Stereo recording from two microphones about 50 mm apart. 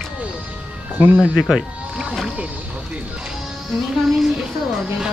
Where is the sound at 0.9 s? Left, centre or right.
Right.